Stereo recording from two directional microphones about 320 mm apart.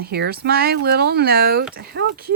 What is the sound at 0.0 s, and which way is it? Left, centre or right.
Speech, right.